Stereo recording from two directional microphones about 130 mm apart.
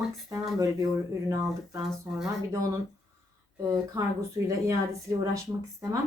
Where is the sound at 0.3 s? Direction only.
25° right (ahead or behind).